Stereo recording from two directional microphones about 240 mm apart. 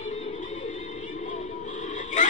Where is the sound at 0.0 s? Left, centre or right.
Left.